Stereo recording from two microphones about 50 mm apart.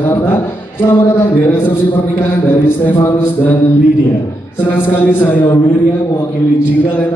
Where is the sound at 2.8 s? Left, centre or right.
Left.